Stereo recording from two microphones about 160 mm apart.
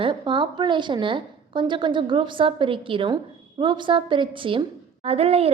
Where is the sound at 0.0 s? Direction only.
30° right (ahead or behind).